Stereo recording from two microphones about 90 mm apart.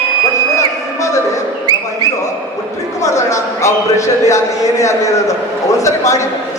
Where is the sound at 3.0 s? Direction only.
35° left (ahead or behind).